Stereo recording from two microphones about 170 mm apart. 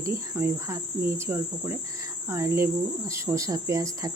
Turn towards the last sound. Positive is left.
turn(degrees=-20)  # may be behind; listen again after turning